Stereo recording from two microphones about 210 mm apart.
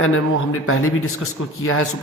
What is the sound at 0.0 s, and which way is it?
Speech, 75° left (ahead or behind).